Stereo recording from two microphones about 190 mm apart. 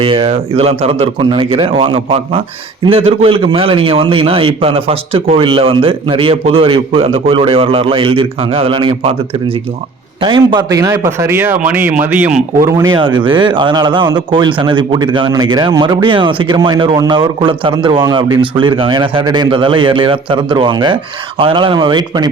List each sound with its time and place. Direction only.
0.0 s a man's voice: 30° right (ahead or behind)
10.2 s a man's voice: 25° right (ahead or behind)